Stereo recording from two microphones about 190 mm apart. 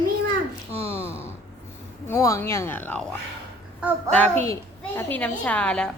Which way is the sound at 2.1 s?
15° left (ahead or behind).